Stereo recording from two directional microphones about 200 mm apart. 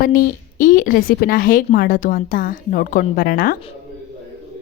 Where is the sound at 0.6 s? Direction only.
40° left (ahead or behind).